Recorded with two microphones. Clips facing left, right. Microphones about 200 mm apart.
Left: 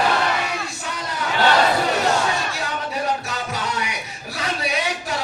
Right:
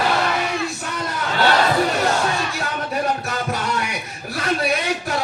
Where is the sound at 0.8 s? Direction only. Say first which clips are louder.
Right 2 dB; 55° right (ahead or behind).